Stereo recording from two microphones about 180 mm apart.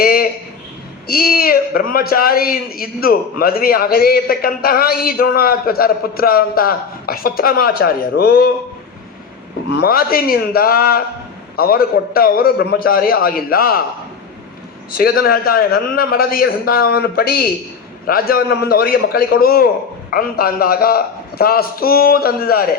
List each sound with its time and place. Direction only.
0.0 s a sound: 55° left (ahead or behind)
1.0 s a man's voice: 55° left (ahead or behind)
9.8 s a man's voice: 55° left (ahead or behind)
14.9 s a man's voice: 55° left (ahead or behind)